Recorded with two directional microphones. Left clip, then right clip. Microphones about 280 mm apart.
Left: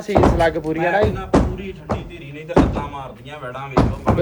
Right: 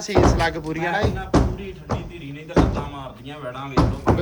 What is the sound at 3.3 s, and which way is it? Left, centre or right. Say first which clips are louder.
Speech: left 1 dB; centre.